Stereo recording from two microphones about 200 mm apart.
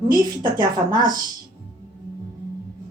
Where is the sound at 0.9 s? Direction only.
45° right (ahead or behind).